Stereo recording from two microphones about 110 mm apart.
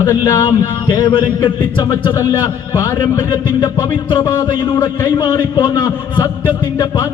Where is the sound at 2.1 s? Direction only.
30° left (ahead or behind).